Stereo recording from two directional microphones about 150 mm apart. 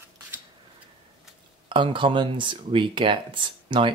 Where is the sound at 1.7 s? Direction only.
35° right (ahead or behind).